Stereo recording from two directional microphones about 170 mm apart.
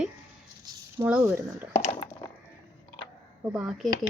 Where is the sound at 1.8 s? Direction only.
25° left (ahead or behind).